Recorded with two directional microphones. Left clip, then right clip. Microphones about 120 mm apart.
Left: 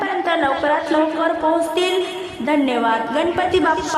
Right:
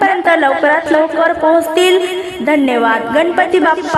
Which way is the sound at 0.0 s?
40° right (ahead or behind).